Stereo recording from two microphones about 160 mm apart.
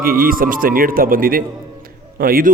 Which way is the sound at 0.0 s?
65° right (ahead or behind).